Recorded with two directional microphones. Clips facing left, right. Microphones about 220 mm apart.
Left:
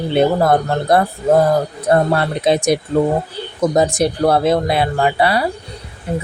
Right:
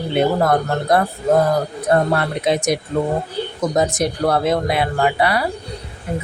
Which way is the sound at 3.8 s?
30° left (ahead or behind).